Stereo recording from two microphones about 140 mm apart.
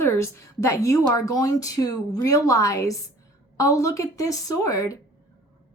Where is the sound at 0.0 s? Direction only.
20° left (ahead or behind).